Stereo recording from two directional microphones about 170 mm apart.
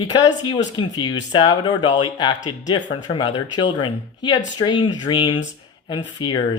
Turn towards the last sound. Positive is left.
turn(degrees=25)  # may be behind; listen again after turning